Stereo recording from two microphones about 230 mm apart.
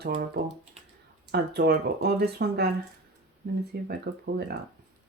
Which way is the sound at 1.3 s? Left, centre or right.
Right.